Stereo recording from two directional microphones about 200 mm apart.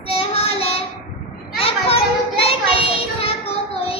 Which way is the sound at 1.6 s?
30° left (ahead or behind).